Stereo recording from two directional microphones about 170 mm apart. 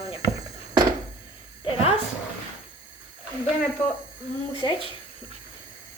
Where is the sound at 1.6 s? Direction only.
35° left (ahead or behind).